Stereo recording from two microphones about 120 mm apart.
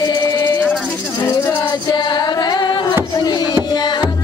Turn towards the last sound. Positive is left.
turn(degrees=35)  # may be behind; listen again after turning